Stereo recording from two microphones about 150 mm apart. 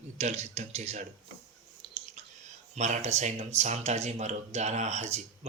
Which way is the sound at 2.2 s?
50° right (ahead or behind).